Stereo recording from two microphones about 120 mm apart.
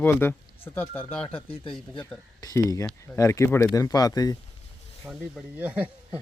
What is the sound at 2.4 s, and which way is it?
Speech, 30° left (ahead or behind).